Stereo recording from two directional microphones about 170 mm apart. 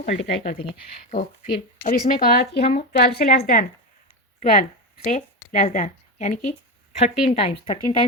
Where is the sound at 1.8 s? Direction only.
55° left (ahead or behind).